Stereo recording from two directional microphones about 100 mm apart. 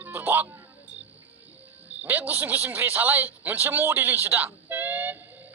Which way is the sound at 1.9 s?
15° right (ahead or behind).